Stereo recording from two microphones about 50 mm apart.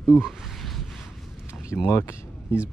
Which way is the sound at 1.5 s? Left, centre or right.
Left.